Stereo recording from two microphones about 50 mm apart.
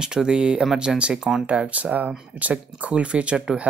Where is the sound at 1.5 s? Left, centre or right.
Right.